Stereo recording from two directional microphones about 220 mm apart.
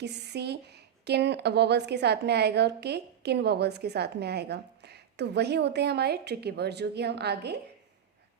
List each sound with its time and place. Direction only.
0.0 s speech: 50° right (ahead or behind)